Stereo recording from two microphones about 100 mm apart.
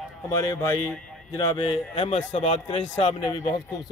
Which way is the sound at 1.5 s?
55° left (ahead or behind).